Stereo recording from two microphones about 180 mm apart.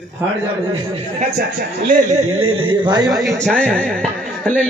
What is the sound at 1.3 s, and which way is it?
Speech, 60° right (ahead or behind).